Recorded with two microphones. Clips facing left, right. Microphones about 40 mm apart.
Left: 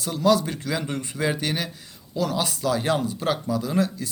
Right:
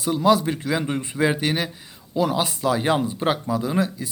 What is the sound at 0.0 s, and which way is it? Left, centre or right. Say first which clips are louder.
Speech: right 2 dB; centre.